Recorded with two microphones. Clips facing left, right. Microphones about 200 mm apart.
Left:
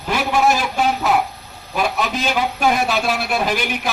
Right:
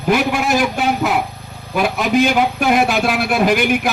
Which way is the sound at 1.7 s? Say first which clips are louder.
Right 5 dB; 50° right (ahead or behind).